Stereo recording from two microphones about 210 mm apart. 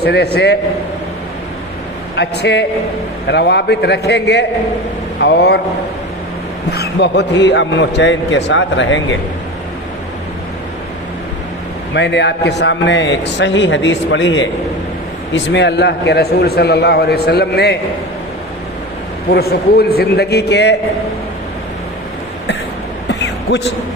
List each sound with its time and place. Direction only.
0.0 s a man's voice: 50° left (ahead or behind)
2.1 s a man's voice: 55° left (ahead or behind)
6.7 s a man's voice: 55° left (ahead or behind)
11.9 s a man's voice: 55° left (ahead or behind)
19.3 s a man's voice: 50° left (ahead or behind)
23.2 s a sound: 55° left (ahead or behind)